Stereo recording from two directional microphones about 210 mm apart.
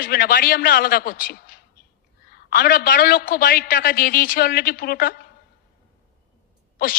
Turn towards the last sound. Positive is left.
turn(degrees=45)  # may be behind; listen again after turning